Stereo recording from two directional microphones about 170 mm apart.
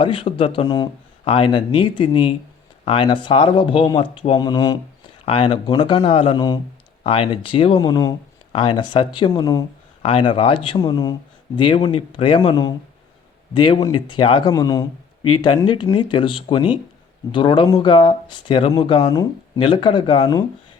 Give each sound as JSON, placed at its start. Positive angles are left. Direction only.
{"t": 0.0, "sound": "speech", "side_deg": 30}